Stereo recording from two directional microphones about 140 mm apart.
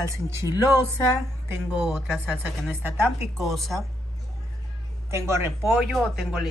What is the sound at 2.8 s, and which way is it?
Speech, 20° right (ahead or behind).